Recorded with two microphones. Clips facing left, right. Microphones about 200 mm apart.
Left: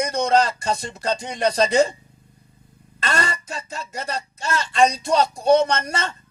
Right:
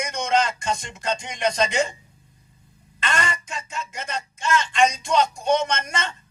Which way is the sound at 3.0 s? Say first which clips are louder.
Left 2 dB; 35° left (ahead or behind).